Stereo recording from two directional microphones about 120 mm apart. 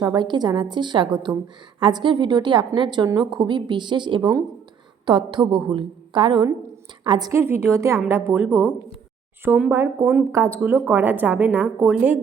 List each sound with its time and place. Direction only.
0.0 s a woman's voice: 35° right (ahead or behind)
7.3 s a woman's voice: 20° right (ahead or behind)